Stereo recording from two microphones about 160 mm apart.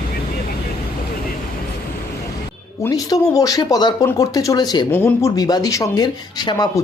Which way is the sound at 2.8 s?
20° left (ahead or behind).